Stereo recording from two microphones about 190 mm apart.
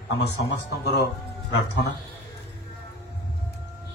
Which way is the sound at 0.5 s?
60° left (ahead or behind).